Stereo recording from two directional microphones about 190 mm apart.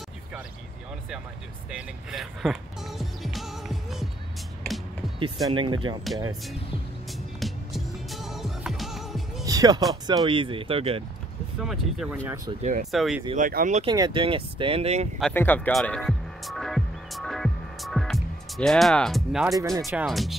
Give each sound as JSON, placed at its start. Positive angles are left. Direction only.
{"t": 1.7, "sound": "speech", "side_deg": -5}
{"t": 4.6, "sound": "music", "side_deg": 0}
{"t": 5.2, "sound": "speech", "side_deg": -25}
{"t": 7.1, "sound": "music", "side_deg": 0}
{"t": 9.4, "sound": "music", "side_deg": -20}
{"t": 10.0, "sound": "speech", "side_deg": -25}
{"t": 11.6, "sound": "speech", "side_deg": 0}
{"t": 13.4, "sound": "speech", "side_deg": -45}
{"t": 13.8, "sound": "speech", "side_deg": -25}
{"t": 15.3, "sound": "music", "side_deg": 10}
{"t": 19.4, "sound": "speech", "side_deg": -15}
{"t": 19.9, "sound": "speech", "side_deg": -5}